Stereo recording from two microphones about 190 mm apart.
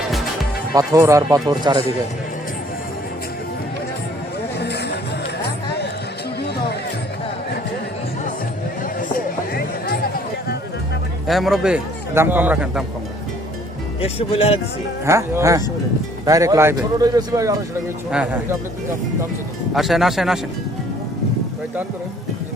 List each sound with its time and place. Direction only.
0.7 s speech: 20° right (ahead or behind)
4.6 s music: 60° left (ahead or behind)
9.0 s a sound: 50° left (ahead or behind)
11.3 s a man's voice: centre (ahead or behind)
14.0 s speech: 30° left (ahead or behind)
15.0 s speech: 15° right (ahead or behind)
18.1 s a man's voice: 5° right (ahead or behind)
19.7 s a man's voice: centre (ahead or behind)